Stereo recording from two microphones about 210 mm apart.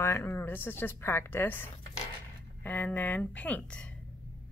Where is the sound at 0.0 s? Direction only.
10° left (ahead or behind).